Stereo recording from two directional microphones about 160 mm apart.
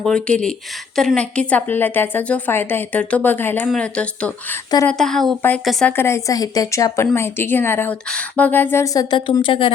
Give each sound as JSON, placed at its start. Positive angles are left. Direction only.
{"t": 0.0, "sound": "a woman's voice", "side_deg": 5}
{"t": 6.0, "sound": "a woman's voice", "side_deg": 15}